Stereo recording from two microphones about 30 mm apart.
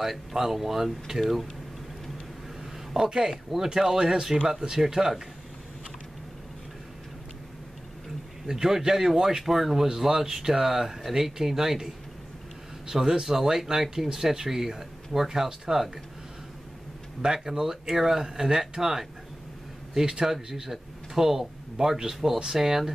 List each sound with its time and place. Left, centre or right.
0.0 s speech: centre
3.1 s speech: centre
8.5 s speech: centre
17.2 s speech: centre